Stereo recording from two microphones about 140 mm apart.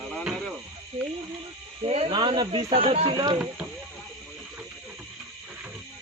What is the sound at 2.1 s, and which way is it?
Speech, 35° right (ahead or behind).